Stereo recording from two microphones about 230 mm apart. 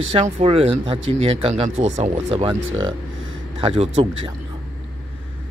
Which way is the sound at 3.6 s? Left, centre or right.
Right.